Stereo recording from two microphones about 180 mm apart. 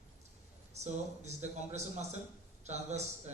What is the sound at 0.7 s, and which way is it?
A man's voice, 40° right (ahead or behind).